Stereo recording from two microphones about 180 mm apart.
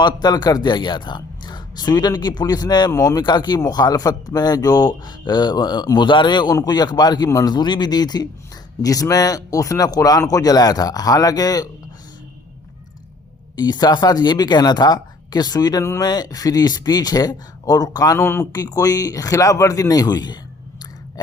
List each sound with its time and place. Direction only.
0.0 s a man's voice: 25° left (ahead or behind)
13.6 s a man's voice: 25° left (ahead or behind)